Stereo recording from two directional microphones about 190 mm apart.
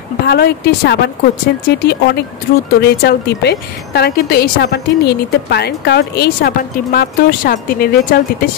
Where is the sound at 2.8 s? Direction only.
60° left (ahead or behind).